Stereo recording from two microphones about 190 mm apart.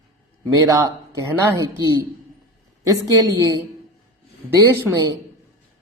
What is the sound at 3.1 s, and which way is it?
A woman's voice, 15° right (ahead or behind).